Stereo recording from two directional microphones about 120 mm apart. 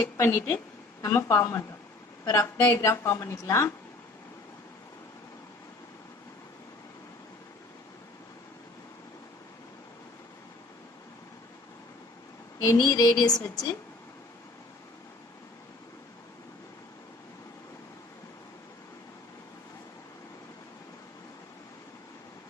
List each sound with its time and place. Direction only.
0.2 s a woman's voice: 20° left (ahead or behind)
12.6 s speech: 30° left (ahead or behind)